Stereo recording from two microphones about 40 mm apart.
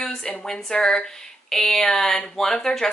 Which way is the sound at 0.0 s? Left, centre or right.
Centre.